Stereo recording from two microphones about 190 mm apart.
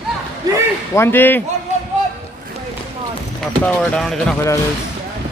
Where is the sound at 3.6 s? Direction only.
5° left (ahead or behind).